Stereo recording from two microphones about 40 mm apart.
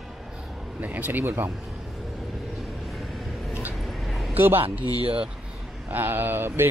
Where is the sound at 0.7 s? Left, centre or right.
Right.